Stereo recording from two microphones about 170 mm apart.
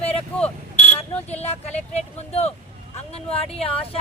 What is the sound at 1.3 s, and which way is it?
Speech, 40° left (ahead or behind).